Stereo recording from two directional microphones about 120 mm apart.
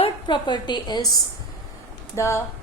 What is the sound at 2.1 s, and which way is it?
Speech, 25° left (ahead or behind).